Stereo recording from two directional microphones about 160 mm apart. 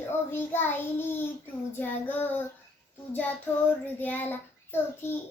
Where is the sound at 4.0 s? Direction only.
10° left (ahead or behind).